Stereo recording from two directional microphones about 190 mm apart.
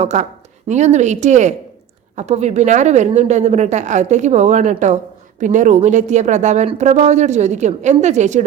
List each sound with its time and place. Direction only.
0.0 s speech: 35° right (ahead or behind)